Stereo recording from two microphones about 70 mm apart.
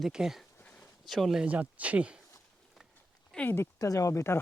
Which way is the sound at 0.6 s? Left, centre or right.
Left.